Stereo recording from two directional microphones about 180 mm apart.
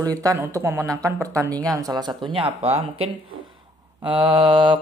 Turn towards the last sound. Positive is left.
turn(degrees=-25)  # may be behind; listen again after turning